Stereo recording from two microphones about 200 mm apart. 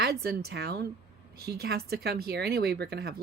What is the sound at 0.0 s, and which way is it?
Speech, 50° right (ahead or behind).